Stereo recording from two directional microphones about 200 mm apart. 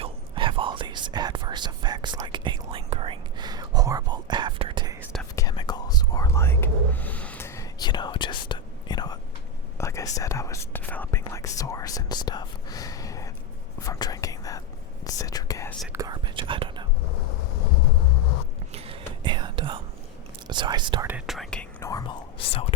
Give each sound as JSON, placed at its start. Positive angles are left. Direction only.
{"t": 0.0, "sound": "whispering", "side_deg": -25}
{"t": 5.4, "sound": "whispering", "side_deg": 20}
{"t": 15.9, "sound": "whispering", "side_deg": -20}
{"t": 18.7, "sound": "whispering", "side_deg": -30}
{"t": 21.1, "sound": "whispering", "side_deg": -5}